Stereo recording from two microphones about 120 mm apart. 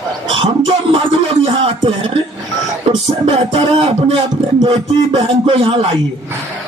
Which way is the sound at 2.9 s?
45° right (ahead or behind).